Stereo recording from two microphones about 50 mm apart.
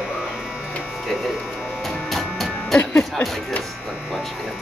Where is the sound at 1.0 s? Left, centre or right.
Centre.